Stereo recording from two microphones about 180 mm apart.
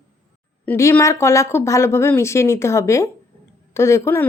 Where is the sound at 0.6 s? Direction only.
10° left (ahead or behind).